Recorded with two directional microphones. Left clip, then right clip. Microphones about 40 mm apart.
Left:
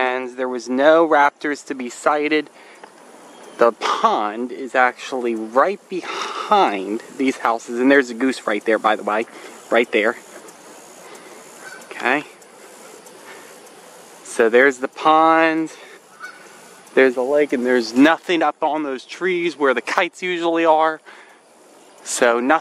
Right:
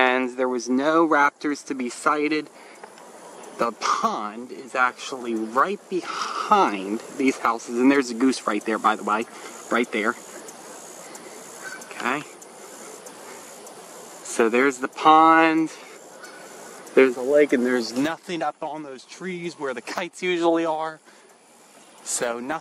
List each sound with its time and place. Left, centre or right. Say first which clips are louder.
0.0 s a sound: right 1 dB; centre
0.4 s speech: left 4 dB; centre
3.5 s speech: left 7 dB; left; by 9.8 s centre
11.9 s speech: left 7 dB; centre
14.3 s speech: left 6 dB; centre
16.9 s speech: left 3 dB; centre
17.2 s speech: left 1 dB; centre
17.7 s speech: left 10 dB; left
20.0 s speech: left 5 dB; centre
22.0 s speech: left 11 dB; left